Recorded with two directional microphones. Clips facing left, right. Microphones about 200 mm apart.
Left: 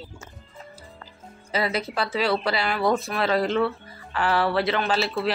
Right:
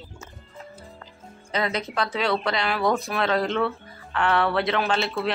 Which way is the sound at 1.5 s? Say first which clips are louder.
Even; 5° left (ahead or behind).